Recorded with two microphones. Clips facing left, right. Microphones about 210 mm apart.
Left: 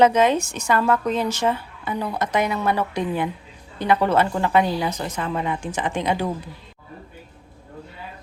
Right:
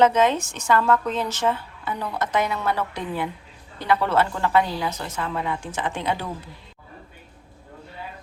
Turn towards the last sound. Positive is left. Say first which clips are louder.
# left 4 dB
turn(degrees=15)  # may be behind; listen again after turning